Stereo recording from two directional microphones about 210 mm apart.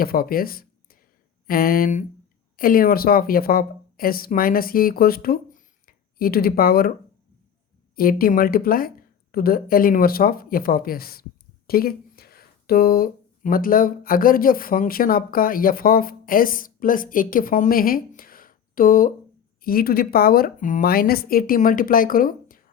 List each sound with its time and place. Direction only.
0.0 s speech: 45° left (ahead or behind)
7.9 s speech: 45° left (ahead or behind)